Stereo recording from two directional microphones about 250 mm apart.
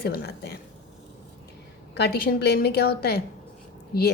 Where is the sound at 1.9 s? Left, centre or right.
Left.